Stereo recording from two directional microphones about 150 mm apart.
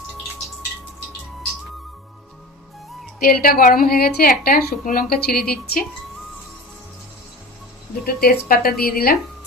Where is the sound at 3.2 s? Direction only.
75° left (ahead or behind).